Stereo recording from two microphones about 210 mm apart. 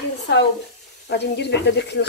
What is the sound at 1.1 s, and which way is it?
Speech, 50° left (ahead or behind).